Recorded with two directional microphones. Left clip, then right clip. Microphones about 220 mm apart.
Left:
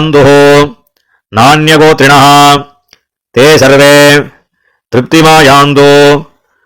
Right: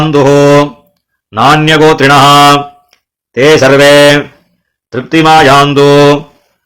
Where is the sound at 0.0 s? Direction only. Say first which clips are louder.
Left 2 dB; 35° left (ahead or behind).